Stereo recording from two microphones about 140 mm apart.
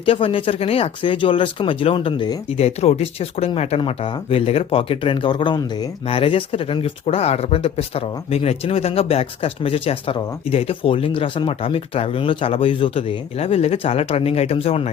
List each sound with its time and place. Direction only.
0.0 s speech: 40° left (ahead or behind)
2.6 s speech: 50° left (ahead or behind); by 5.9 s 30° left (ahead or behind)
6.1 s speech: 40° left (ahead or behind)